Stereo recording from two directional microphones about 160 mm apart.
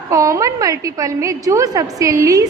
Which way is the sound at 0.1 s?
20° right (ahead or behind).